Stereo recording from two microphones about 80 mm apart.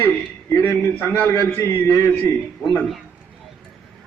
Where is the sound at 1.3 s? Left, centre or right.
Left.